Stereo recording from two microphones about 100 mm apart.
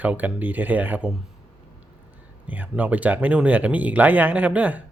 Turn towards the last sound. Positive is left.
turn(degrees=-15)  # may be behind; listen again after turning